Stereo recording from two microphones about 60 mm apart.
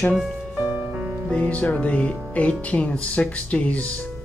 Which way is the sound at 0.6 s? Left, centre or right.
Right.